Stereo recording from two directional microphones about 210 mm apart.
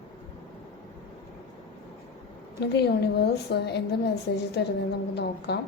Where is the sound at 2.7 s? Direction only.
50° left (ahead or behind).